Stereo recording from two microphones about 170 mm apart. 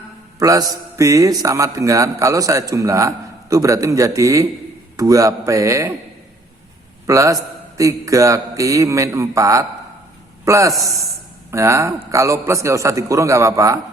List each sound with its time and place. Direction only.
0.3 s a man's voice: 20° right (ahead or behind)
7.1 s a man's voice: 20° right (ahead or behind)